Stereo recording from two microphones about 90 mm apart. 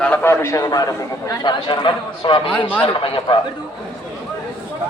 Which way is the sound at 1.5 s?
60° left (ahead or behind).